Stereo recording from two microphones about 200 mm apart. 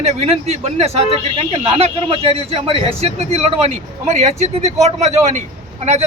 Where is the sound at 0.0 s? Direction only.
30° right (ahead or behind).